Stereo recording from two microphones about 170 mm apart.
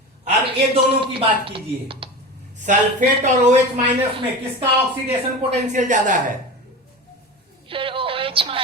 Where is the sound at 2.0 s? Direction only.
30° right (ahead or behind).